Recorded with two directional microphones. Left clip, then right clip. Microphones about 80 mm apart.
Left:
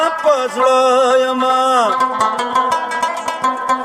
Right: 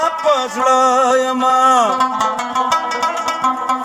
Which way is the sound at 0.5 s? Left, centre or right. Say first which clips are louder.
Even; centre.